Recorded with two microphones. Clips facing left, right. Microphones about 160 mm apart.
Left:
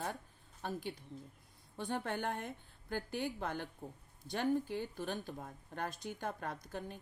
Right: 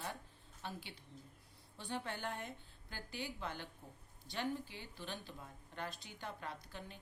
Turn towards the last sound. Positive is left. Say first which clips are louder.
# left 6 dB
turn(degrees=50)  # may be behind; listen again after turning